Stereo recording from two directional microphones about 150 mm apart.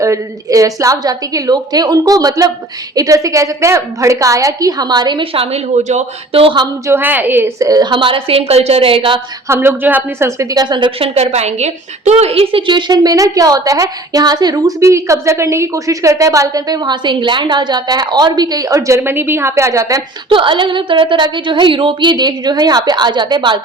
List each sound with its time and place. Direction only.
0.0 s a woman's voice: 20° right (ahead or behind)
6.8 s a woman's voice: 15° right (ahead or behind); by 9.2 s 35° right (ahead or behind)
9.5 s a woman's voice: 15° right (ahead or behind); by 11.1 s 30° right (ahead or behind)
11.1 s a woman's voice: 45° right (ahead or behind); by 20.0 s 20° right (ahead or behind)
20.3 s a woman's voice: 35° right (ahead or behind)